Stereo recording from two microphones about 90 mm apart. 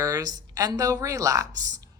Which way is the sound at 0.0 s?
45° right (ahead or behind).